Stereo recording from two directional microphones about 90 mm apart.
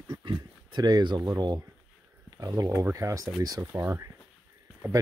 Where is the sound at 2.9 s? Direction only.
35° right (ahead or behind).